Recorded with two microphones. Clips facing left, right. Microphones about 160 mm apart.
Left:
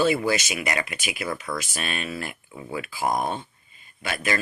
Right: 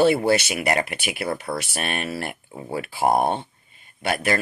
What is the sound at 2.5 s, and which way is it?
Speech, 40° right (ahead or behind).